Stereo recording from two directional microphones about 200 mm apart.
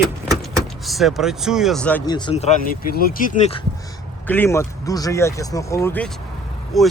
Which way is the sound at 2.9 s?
45° left (ahead or behind).